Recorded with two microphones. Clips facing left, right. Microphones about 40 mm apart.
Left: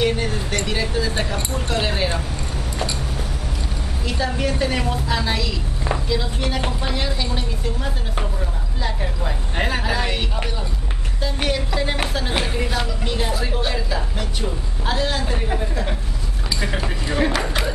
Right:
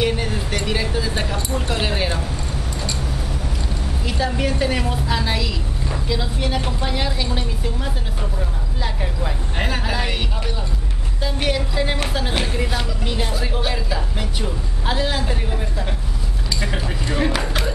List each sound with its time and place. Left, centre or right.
0.0 s a sound: centre
0.7 s speech: centre
1.7 s a sound: centre
4.0 s speech: centre
11.4 s speech: centre
17.1 s speech: centre